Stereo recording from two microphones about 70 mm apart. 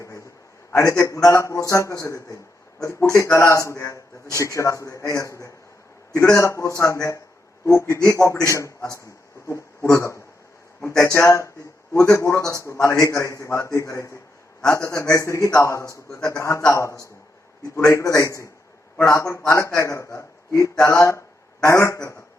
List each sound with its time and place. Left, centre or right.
0.7 s a man's voice: left